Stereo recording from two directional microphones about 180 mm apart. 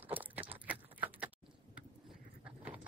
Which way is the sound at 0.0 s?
10° right (ahead or behind).